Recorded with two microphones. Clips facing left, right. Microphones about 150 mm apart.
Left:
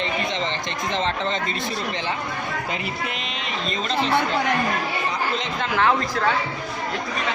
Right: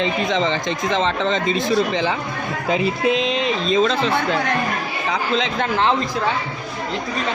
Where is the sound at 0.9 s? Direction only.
90° right.